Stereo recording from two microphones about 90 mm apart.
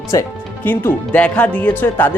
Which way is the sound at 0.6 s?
25° left (ahead or behind).